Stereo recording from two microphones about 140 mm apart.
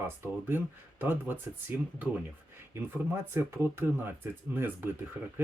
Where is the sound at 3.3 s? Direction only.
15° right (ahead or behind).